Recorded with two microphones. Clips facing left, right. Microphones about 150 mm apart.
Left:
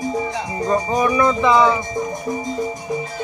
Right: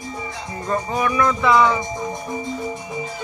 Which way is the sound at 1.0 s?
20° left (ahead or behind).